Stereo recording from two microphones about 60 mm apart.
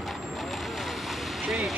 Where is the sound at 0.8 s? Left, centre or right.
Centre.